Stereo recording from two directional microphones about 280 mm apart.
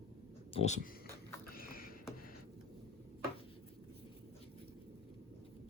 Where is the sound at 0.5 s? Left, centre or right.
Left.